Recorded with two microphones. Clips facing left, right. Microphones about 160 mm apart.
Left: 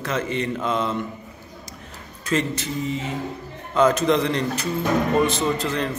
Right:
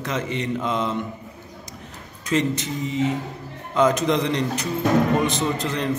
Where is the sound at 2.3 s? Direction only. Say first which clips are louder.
Right 1 dB; 20° right (ahead or behind).